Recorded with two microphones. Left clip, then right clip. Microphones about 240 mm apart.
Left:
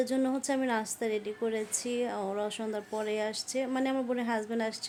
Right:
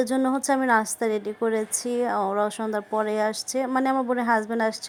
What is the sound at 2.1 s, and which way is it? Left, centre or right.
Speech, centre.